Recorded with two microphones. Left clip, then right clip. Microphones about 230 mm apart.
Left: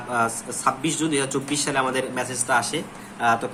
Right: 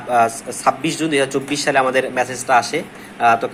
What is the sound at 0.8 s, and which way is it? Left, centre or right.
Speech, centre.